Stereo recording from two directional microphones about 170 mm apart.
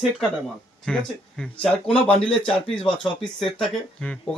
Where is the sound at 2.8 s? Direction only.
30° left (ahead or behind).